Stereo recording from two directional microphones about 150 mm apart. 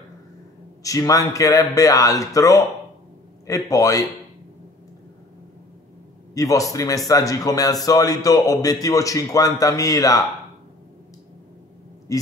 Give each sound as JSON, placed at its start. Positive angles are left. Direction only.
{"t": 0.8, "sound": "speech", "side_deg": 20}
{"t": 6.3, "sound": "speech", "side_deg": 20}
{"t": 12.1, "sound": "speech", "side_deg": 20}